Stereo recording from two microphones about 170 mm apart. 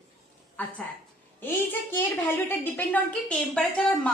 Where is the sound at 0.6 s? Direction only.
10° left (ahead or behind).